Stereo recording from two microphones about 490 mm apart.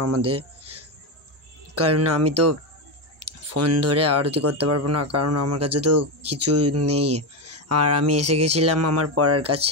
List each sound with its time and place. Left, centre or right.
0.4 s a sound: right
1.8 s speech: right
6.9 s speech: centre
7.4 s speech: right